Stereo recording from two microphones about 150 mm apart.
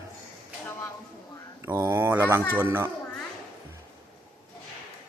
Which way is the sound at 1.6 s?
15° right (ahead or behind).